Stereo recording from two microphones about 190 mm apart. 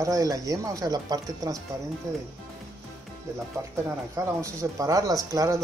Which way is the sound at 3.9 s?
15° right (ahead or behind).